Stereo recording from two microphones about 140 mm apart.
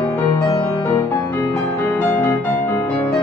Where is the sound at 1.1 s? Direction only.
15° left (ahead or behind).